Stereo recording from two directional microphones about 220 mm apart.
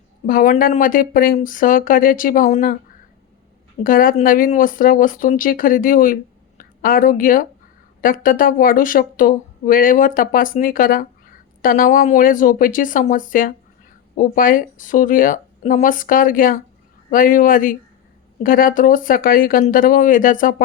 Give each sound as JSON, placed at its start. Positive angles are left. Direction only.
{"t": 0.3, "sound": "speech", "side_deg": 40}
{"t": 3.8, "sound": "a woman's voice", "side_deg": 40}